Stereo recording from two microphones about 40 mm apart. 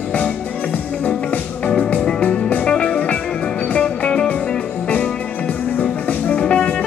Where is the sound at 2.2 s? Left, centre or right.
Left.